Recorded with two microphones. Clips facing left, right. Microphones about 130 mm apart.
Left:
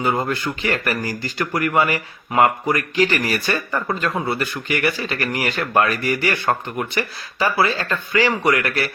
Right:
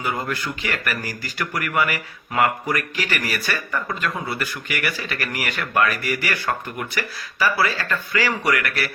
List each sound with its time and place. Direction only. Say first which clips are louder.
0.0 s speech: left 5 dB; 25° left (ahead or behind)